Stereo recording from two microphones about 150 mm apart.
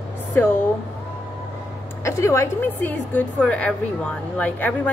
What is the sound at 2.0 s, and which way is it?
A woman's voice, 20° left (ahead or behind).